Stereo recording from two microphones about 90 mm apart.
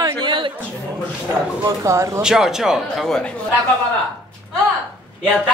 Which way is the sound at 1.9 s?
35° right (ahead or behind).